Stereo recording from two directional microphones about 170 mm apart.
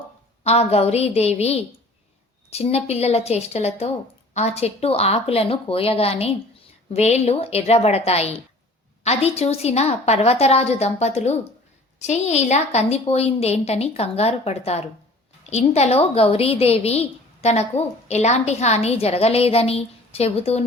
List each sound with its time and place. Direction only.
0.4 s a woman's voice: 40° left (ahead or behind)